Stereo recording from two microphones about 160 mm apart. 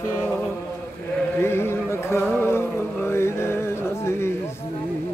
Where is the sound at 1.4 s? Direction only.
15° left (ahead or behind).